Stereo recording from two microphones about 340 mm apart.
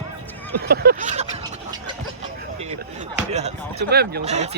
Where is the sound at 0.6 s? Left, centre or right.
Right.